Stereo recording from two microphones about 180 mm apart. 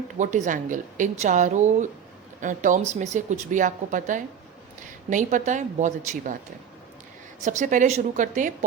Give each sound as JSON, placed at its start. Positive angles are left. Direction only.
{"t": 0.2, "sound": "speech", "side_deg": -40}
{"t": 7.4, "sound": "speech", "side_deg": -45}